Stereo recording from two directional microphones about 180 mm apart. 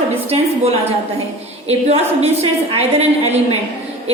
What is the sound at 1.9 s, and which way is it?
A woman's voice, 35° right (ahead or behind).